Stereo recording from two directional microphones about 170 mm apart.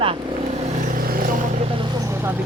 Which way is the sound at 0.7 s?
55° right (ahead or behind).